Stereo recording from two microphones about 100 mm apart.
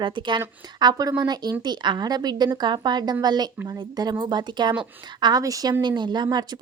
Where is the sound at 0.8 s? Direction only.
40° right (ahead or behind).